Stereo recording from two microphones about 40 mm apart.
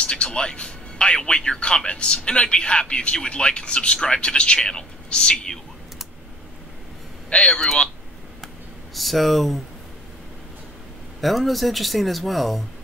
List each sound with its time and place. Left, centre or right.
0.0 s a man's voice: left
7.2 s speech: left
8.9 s speech: centre
11.1 s speech: centre